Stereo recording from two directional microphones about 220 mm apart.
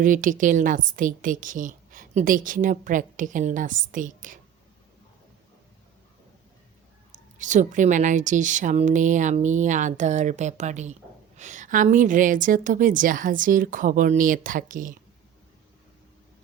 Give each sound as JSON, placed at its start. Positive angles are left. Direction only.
{"t": 0.0, "sound": "a woman's voice", "side_deg": -35}
{"t": 7.1, "sound": "a woman's voice", "side_deg": -35}